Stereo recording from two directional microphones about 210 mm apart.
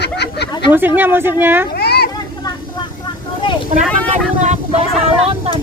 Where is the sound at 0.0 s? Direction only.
50° left (ahead or behind).